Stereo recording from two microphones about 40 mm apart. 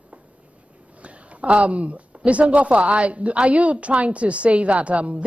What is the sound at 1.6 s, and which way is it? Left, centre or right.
A woman's voice, right.